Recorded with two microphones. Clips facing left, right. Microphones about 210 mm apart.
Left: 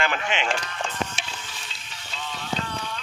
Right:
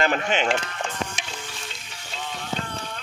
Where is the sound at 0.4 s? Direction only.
25° right (ahead or behind).